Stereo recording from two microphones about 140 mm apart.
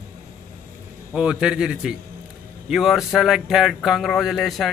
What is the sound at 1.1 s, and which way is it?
A man's voice, 5° right (ahead or behind).